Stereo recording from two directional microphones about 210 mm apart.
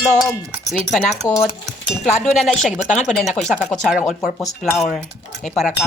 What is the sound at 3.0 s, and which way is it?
Speech, centre (ahead or behind).